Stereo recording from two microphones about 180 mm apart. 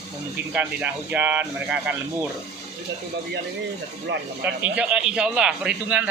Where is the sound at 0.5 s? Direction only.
10° right (ahead or behind).